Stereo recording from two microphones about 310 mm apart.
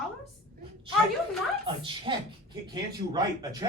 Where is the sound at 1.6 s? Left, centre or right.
Centre.